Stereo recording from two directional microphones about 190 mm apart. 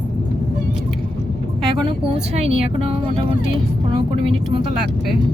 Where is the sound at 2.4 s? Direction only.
30° right (ahead or behind).